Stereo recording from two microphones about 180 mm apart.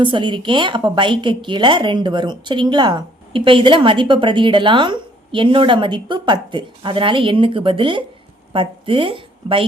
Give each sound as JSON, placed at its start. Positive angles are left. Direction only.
{"t": 0.0, "sound": "a woman's voice", "side_deg": -25}